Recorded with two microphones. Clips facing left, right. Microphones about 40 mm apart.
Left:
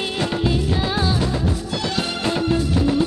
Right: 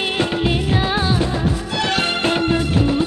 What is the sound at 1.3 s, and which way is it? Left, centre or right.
Music, right.